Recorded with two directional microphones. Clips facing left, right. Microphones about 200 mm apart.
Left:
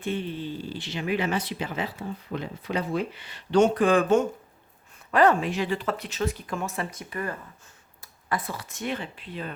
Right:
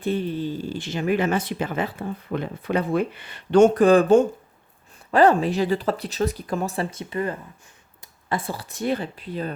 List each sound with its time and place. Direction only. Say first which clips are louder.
0.0 s speech: right 5 dB; 40° right (ahead or behind)